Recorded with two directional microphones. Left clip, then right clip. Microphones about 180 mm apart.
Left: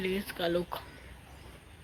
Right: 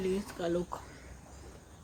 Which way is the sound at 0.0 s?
Centre (ahead or behind).